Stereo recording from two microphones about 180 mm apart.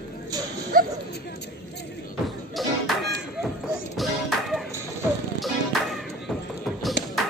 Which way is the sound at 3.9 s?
Centre (ahead or behind).